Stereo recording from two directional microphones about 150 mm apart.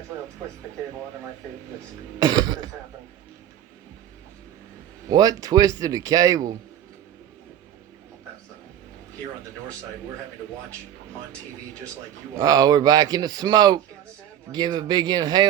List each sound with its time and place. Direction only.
2.1 s speech: 25° right (ahead or behind)
5.0 s speech: 25° right (ahead or behind)
12.4 s speech: 25° right (ahead or behind)